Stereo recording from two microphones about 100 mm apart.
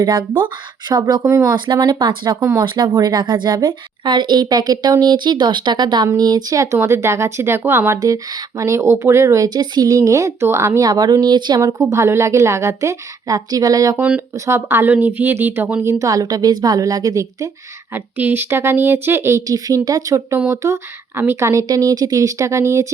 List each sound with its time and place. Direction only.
0.0 s a woman's voice: 50° right (ahead or behind); by 1.5 s 30° right (ahead or behind)
1.5 s a woman's voice: 50° right (ahead or behind)
2.4 s a woman's voice: 30° right (ahead or behind)
2.7 s a woman's voice: 45° right (ahead or behind); by 7.9 s 25° right (ahead or behind)
7.9 s speech: 40° right (ahead or behind)
11.6 s speech: 30° right (ahead or behind)
13.9 s speech: 15° right (ahead or behind)
14.3 s a woman's voice: 30° right (ahead or behind)
17.9 s a woman's voice: 20° right (ahead or behind)
19.5 s speech: 35° right (ahead or behind)